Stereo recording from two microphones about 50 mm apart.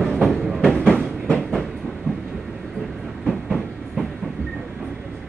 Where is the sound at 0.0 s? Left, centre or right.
Centre.